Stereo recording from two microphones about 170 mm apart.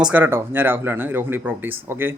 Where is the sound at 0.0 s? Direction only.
10° right (ahead or behind).